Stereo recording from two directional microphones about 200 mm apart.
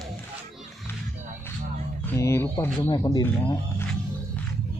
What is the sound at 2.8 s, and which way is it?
Speech, 25° left (ahead or behind).